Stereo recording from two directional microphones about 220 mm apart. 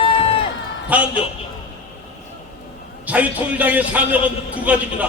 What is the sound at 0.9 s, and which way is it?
Speech, 5° right (ahead or behind).